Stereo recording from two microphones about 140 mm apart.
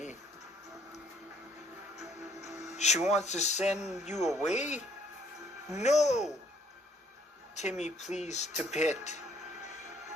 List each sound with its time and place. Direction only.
2.0 s music: 55° left (ahead or behind)
3.1 s speech: 55° left (ahead or behind)
3.8 s speech: 5° right (ahead or behind)
4.0 s speech: 55° left (ahead or behind)
5.8 s speech: 55° left (ahead or behind)
7.5 s speech: 55° left (ahead or behind)